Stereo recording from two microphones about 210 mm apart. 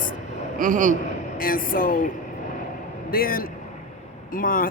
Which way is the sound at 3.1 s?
45° left (ahead or behind).